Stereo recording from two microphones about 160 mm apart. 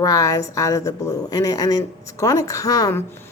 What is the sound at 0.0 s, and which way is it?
A woman's voice, 20° left (ahead or behind).